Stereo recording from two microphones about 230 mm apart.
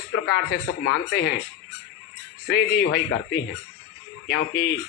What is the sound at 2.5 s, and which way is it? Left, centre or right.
A man's voice, left.